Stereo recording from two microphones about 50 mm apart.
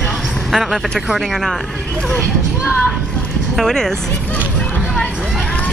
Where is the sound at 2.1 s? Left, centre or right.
Left.